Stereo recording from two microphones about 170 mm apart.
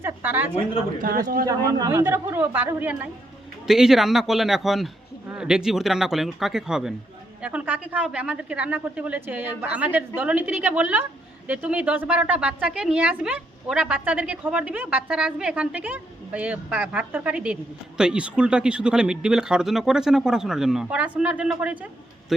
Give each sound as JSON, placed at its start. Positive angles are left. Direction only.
{"t": 0.0, "sound": "a sound", "side_deg": -10}
{"t": 1.1, "sound": "speech", "side_deg": -55}
{"t": 1.5, "sound": "a woman's voice", "side_deg": -20}